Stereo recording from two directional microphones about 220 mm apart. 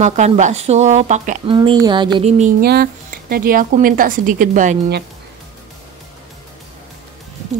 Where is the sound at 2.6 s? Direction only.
45° right (ahead or behind).